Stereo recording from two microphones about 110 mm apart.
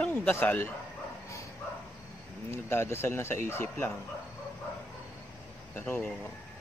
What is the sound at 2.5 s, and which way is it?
Speech, 20° left (ahead or behind).